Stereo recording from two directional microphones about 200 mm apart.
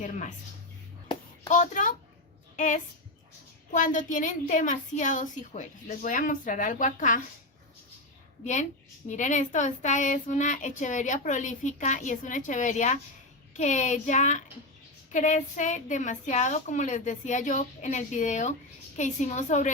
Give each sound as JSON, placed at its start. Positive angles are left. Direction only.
{"t": 0.0, "sound": "a sound", "side_deg": 40}
{"t": 1.5, "sound": "speech", "side_deg": 40}
{"t": 9.0, "sound": "speech", "side_deg": 35}